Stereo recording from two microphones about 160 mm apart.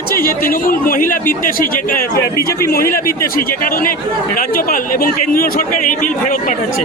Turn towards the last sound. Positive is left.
turn(degrees=55)  # may be behind; listen again after turning